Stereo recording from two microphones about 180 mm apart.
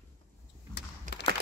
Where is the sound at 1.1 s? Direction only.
45° right (ahead or behind).